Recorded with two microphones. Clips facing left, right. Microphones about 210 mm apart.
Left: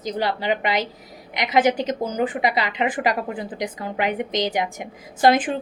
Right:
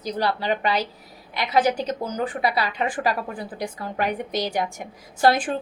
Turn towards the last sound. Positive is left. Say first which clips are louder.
# left 2 dB
turn(degrees=15)  # may be behind; listen again after turning